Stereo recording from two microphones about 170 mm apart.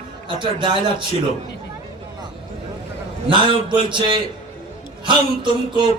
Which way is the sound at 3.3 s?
30° right (ahead or behind).